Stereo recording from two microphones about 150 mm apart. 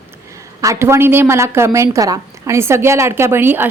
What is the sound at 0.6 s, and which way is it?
A woman's voice, 20° right (ahead or behind).